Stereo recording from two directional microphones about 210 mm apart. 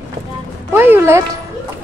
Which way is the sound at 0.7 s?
10° right (ahead or behind).